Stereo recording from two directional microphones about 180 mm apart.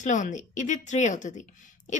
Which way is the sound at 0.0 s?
45° left (ahead or behind).